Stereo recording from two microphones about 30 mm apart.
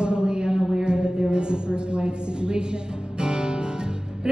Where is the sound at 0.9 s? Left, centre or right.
Right.